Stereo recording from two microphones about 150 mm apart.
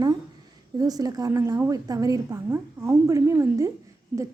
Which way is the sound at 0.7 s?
25° right (ahead or behind).